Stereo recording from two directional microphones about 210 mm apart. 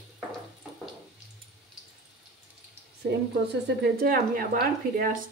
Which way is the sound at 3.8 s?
45° right (ahead or behind).